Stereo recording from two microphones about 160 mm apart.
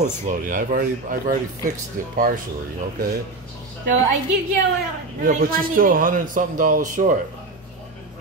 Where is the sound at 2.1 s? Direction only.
60° right (ahead or behind).